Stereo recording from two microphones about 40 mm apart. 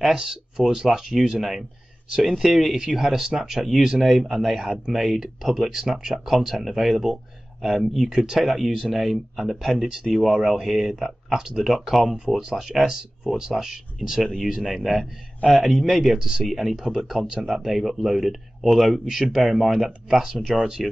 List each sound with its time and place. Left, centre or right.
0.0 s speech: centre
2.2 s speech: centre
2.7 s speech: centre
8.1 s speech: centre
14.6 s speech: centre
20.8 s speech: centre